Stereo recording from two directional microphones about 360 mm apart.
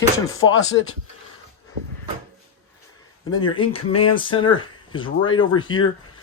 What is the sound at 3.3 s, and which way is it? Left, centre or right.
Speech, centre.